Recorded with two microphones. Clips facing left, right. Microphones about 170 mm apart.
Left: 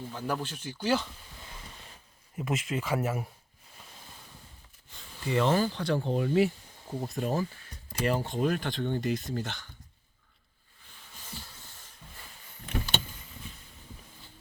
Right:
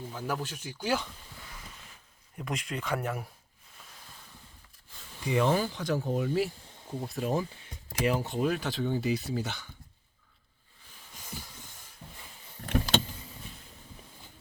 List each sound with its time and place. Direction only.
0.1 s speech: 5° right (ahead or behind)
2.3 s speech: 5° left (ahead or behind)
5.2 s speech: 10° right (ahead or behind)
12.6 s power windows: 90° right